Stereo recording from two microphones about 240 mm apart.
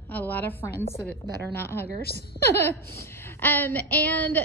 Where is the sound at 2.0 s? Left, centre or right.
Left.